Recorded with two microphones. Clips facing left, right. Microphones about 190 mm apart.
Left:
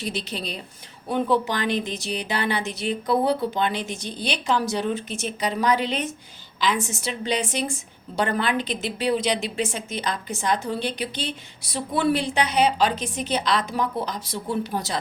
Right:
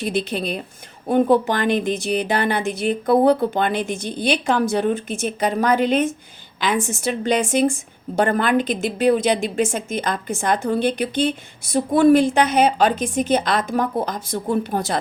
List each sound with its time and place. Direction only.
0.0 s a woman's voice: 55° right (ahead or behind)